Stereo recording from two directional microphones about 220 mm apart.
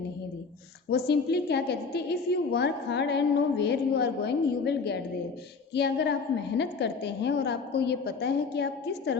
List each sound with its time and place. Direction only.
0.9 s a woman's voice: 50° left (ahead or behind)